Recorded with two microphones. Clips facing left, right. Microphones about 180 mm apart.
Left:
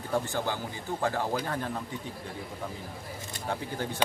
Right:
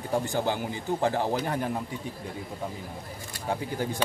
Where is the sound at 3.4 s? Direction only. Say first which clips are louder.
Right 3 dB; 10° right (ahead or behind).